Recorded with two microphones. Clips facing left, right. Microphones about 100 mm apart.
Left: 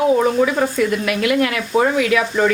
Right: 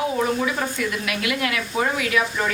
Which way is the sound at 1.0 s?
45° left (ahead or behind).